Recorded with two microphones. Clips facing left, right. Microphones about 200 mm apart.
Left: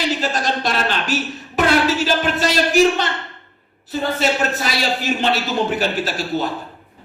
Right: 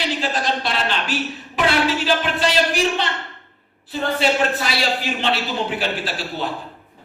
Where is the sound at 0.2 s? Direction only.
45° left (ahead or behind).